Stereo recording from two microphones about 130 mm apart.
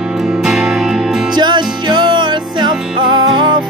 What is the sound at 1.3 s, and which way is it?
Music, 35° right (ahead or behind).